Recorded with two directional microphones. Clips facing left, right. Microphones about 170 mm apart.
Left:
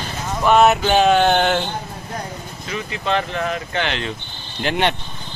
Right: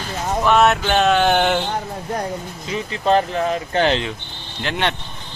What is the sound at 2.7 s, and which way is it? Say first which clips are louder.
Speech: right 4 dB; 35° right (ahead or behind).